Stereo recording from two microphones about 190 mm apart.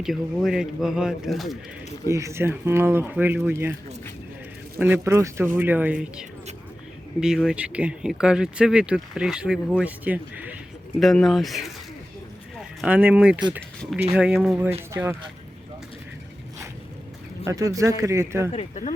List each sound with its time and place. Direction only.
0.0 s speech: centre (ahead or behind)
2.0 s speech: 15° right (ahead or behind)
4.8 s speech: 15° right (ahead or behind)
17.4 s speech: 15° right (ahead or behind)
18.5 s speech: 35° left (ahead or behind)